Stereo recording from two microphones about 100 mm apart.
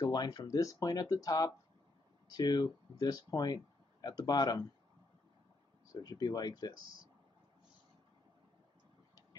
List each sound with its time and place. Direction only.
0.0 s speech: 45° left (ahead or behind)
5.9 s speech: 40° left (ahead or behind)